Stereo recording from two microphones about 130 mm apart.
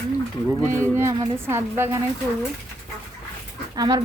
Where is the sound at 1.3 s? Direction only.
20° right (ahead or behind).